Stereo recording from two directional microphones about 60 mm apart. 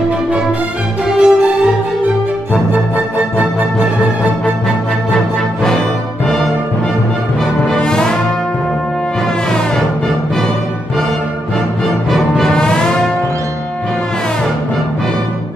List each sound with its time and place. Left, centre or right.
1.1 s music: centre
5.1 s music: centre
7.6 s brass instrument: centre
12.1 s music: centre